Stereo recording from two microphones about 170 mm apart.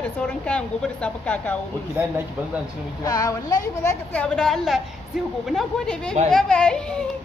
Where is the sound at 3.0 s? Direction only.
20° left (ahead or behind).